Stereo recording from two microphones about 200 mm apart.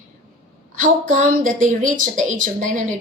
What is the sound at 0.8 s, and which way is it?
A woman's voice, 40° right (ahead or behind).